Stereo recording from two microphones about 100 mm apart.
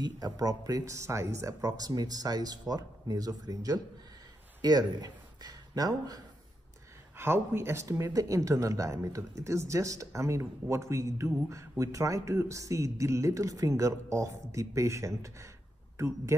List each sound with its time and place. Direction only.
0.0 s speech: 40° right (ahead or behind)
7.2 s speech: 25° right (ahead or behind)